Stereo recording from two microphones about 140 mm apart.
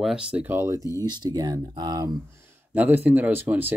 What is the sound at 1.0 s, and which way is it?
Speech, 30° right (ahead or behind).